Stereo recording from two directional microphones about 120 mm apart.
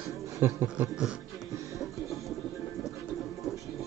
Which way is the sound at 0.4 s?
15° right (ahead or behind).